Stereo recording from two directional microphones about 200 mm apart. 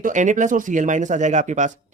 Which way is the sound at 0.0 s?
40° right (ahead or behind).